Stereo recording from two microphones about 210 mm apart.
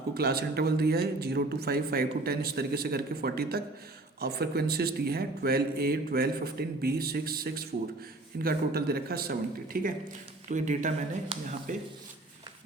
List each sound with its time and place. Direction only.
0.1 s speech: 50° right (ahead or behind)